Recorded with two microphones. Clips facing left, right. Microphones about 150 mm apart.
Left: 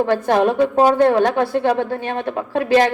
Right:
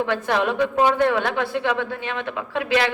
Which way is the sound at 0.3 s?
45° left (ahead or behind).